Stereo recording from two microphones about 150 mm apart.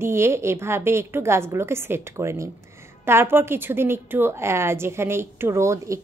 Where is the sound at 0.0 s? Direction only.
15° right (ahead or behind).